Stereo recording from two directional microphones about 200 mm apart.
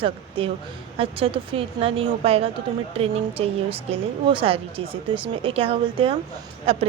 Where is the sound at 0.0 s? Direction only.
25° right (ahead or behind).